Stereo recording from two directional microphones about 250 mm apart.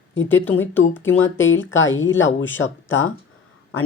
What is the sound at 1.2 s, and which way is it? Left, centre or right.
Speech, left.